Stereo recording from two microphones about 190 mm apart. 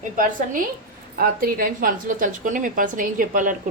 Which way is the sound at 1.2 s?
50° right (ahead or behind).